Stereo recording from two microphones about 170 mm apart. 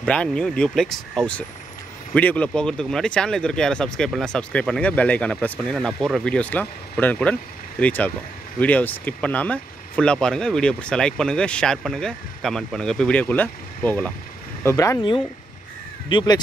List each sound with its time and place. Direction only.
0.0 s speech: 5° left (ahead or behind)
16.1 s speech: 30° left (ahead or behind)